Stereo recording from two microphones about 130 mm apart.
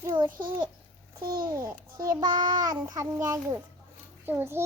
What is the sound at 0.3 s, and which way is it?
Speech, 90° right.